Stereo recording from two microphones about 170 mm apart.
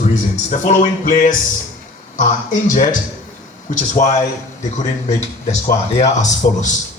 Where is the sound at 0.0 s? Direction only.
45° left (ahead or behind).